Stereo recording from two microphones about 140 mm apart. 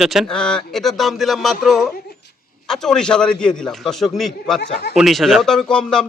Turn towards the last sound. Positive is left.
turn(degrees=5)  # may be behind; listen again after turning